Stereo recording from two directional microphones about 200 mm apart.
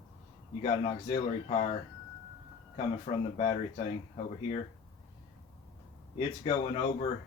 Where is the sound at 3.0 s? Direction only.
30° left (ahead or behind).